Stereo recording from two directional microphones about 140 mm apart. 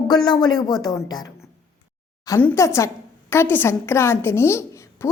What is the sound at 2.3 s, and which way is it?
A woman's voice, 15° left (ahead or behind).